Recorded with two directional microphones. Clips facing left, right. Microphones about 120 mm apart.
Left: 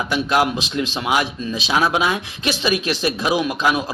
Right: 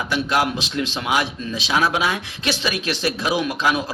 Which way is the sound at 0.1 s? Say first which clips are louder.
Left 2 dB; 15° left (ahead or behind).